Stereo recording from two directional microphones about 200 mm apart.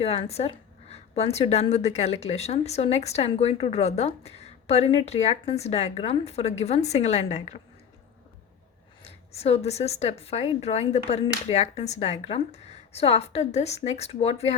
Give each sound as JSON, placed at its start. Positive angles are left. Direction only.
{"t": 0.0, "sound": "a woman's voice", "side_deg": 30}
{"t": 9.0, "sound": "a woman's voice", "side_deg": 30}